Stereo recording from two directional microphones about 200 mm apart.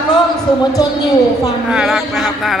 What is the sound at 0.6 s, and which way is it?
Speech, 20° left (ahead or behind).